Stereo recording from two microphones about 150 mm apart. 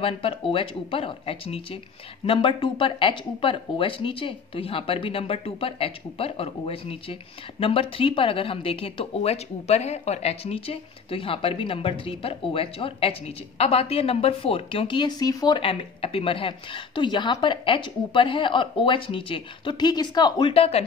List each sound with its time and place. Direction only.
0.0 s a woman's voice: 40° left (ahead or behind)
20.5 s a woman's voice: 40° left (ahead or behind)